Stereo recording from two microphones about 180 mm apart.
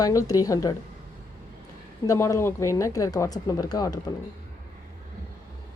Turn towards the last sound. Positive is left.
turn(degrees=20)  # may be behind; listen again after turning